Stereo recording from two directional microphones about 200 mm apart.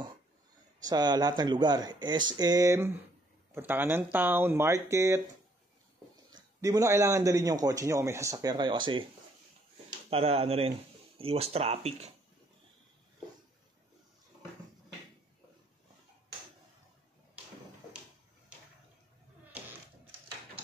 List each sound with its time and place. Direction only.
0.8 s a man's voice: 20° right (ahead or behind)
6.3 s a man's voice: 15° right (ahead or behind)